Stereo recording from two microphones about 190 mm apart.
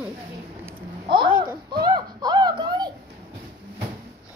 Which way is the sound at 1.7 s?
20° right (ahead or behind).